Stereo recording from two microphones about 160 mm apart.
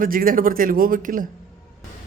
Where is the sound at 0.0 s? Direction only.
60° right (ahead or behind).